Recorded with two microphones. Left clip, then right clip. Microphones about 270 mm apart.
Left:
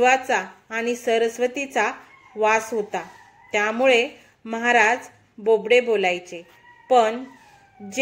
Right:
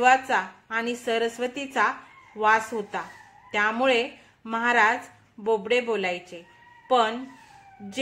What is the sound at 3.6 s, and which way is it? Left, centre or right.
Speech, centre.